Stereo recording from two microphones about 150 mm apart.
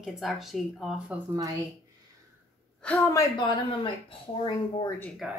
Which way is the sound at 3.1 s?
25° left (ahead or behind).